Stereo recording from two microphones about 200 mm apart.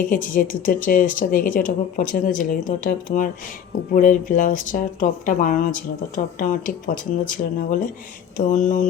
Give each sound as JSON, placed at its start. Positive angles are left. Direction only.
{"t": 0.0, "sound": "speech", "side_deg": 45}